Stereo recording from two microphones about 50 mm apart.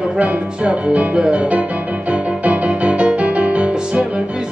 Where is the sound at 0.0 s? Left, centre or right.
Right.